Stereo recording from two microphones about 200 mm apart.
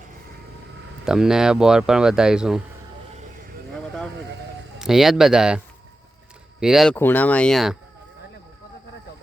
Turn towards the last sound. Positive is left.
turn(degrees=0)  # may be behind; listen again after turning